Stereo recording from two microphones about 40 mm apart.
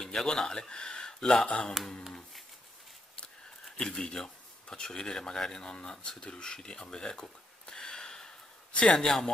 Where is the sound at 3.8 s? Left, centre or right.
Centre.